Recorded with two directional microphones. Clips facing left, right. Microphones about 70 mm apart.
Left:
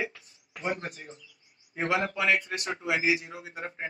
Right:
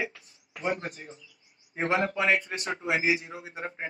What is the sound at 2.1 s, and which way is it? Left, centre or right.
A man's voice, right.